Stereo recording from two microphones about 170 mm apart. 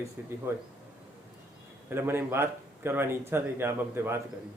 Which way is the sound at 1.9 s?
15° right (ahead or behind).